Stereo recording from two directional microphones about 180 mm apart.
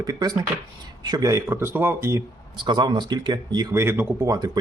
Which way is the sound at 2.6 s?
25° right (ahead or behind).